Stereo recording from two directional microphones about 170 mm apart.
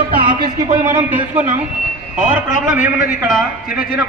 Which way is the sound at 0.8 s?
10° right (ahead or behind).